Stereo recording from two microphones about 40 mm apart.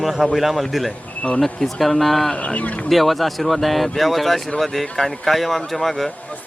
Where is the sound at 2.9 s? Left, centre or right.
Centre.